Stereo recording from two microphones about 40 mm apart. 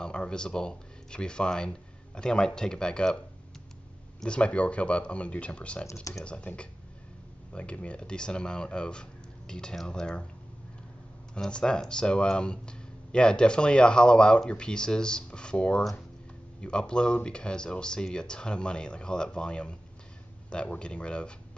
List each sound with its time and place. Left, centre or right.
0.0 s speech: left
4.2 s speech: left
11.3 s speech: left